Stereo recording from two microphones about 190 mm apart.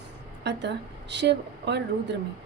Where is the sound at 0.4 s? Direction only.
65° right (ahead or behind).